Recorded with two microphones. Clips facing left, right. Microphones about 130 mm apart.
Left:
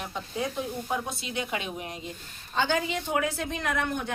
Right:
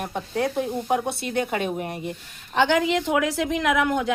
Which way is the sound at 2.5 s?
80° right.